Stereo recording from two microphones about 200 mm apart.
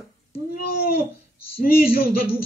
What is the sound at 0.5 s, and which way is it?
A man's voice, 50° left (ahead or behind).